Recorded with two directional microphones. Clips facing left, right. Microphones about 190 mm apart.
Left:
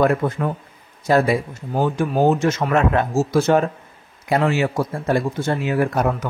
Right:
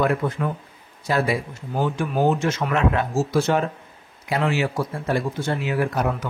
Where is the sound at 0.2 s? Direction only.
45° left (ahead or behind).